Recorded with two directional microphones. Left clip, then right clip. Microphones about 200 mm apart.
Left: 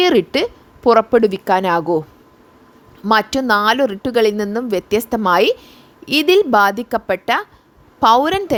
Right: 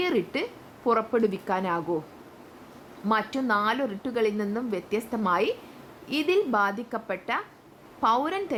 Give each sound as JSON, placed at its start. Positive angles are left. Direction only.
{"t": 0.0, "sound": "a woman's voice", "side_deg": 45}
{"t": 3.1, "sound": "a woman's voice", "side_deg": 45}